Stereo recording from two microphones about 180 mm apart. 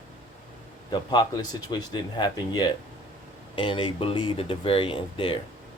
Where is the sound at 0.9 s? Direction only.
25° left (ahead or behind).